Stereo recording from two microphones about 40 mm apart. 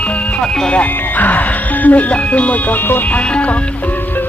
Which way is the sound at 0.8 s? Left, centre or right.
Left.